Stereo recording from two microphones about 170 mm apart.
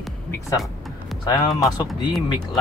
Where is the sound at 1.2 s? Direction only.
25° left (ahead or behind).